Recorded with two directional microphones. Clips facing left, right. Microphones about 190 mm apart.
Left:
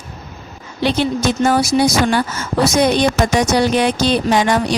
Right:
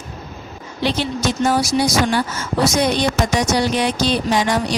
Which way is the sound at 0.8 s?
55° left (ahead or behind).